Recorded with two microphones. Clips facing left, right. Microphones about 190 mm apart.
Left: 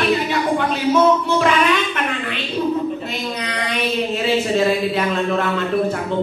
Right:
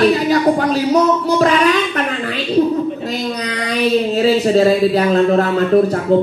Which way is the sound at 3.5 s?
40° right (ahead or behind).